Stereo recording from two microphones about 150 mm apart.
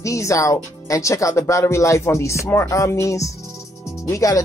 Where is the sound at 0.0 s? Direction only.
20° left (ahead or behind).